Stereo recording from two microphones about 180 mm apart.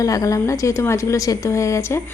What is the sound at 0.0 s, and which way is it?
A woman's voice, 20° left (ahead or behind).